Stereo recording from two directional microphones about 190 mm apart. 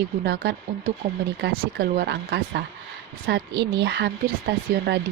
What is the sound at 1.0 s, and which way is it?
Speech, 40° right (ahead or behind).